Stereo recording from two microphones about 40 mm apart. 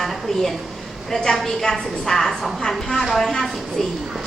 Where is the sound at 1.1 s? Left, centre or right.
Centre.